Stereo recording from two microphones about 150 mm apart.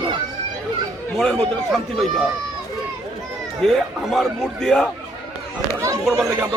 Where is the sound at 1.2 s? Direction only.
5° left (ahead or behind).